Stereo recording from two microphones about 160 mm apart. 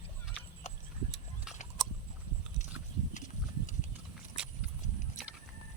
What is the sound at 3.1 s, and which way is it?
Horse, 50° left (ahead or behind).